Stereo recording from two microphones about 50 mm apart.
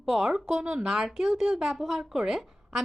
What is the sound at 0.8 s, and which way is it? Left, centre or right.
A woman's voice, centre.